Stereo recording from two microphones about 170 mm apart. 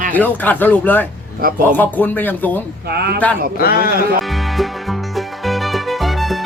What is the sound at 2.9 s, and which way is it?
Speech, 70° right (ahead or behind).